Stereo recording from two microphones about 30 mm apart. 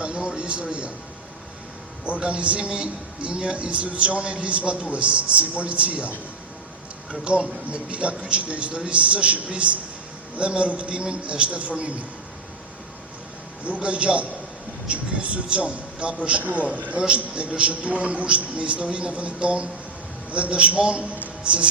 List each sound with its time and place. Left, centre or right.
0.0 s a sound: right
2.0 s a man's voice: right
13.7 s a man's voice: right
16.4 s speech: right
16.6 s a man's voice: right
17.5 s a man's voice: right